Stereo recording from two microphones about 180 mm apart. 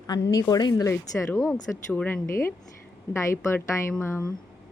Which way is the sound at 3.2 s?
15° left (ahead or behind).